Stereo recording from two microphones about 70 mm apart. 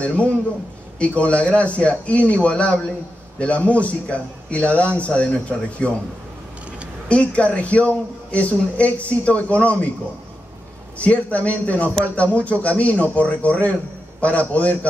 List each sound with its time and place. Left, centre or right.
0.0 s a man's voice: centre
7.1 s speech: centre
11.0 s speech: left